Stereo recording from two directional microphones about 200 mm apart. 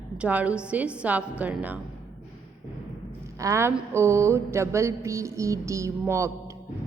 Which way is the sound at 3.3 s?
15° right (ahead or behind).